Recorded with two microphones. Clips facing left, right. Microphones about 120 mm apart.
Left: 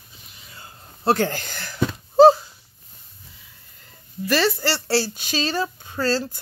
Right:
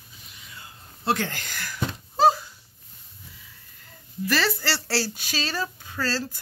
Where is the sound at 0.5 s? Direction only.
35° left (ahead or behind).